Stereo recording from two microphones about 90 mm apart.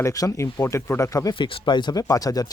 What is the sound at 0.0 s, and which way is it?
Speech, 40° left (ahead or behind).